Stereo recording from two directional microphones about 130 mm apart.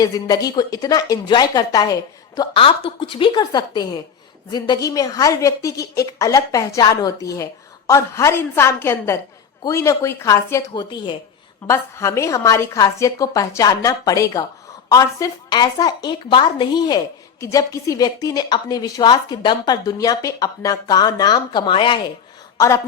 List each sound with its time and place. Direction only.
0.0 s a woman's voice: 30° left (ahead or behind)
2.6 s a woman's voice: 45° left (ahead or behind); by 10.6 s 20° left (ahead or behind)
10.8 s a woman's voice: 40° left (ahead or behind)
11.7 s a woman's voice: 20° left (ahead or behind); by 22.0 s 40° left (ahead or behind)
22.5 s speech: 25° left (ahead or behind)